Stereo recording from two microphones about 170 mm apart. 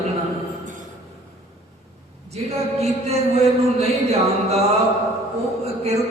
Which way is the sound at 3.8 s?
40° right (ahead or behind).